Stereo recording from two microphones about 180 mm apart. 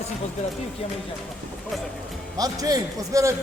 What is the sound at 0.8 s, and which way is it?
Speech, 30° left (ahead or behind).